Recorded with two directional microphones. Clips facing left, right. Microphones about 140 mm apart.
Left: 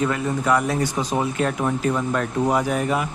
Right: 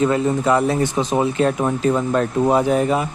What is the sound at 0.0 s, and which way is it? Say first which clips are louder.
Speech: right 5 dB; 25° right (ahead or behind).